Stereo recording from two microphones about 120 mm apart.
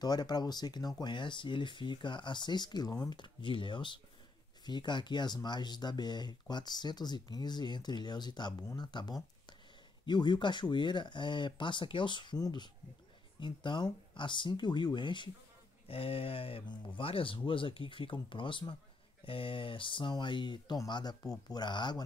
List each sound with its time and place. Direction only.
0.0 s speech: 35° left (ahead or behind)
15.9 s speech: 50° left (ahead or behind)